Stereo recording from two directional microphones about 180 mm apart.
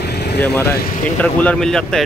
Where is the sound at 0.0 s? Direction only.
65° left (ahead or behind).